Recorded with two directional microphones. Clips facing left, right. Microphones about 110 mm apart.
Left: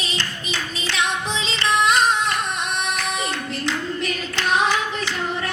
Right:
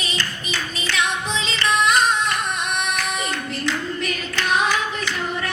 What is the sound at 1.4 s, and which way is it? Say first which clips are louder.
Music: even; 25° left (ahead or behind).